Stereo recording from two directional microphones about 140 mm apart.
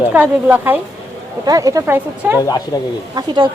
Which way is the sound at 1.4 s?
25° right (ahead or behind).